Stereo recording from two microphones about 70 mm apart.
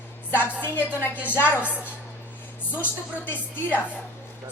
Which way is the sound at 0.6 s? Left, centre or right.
Left.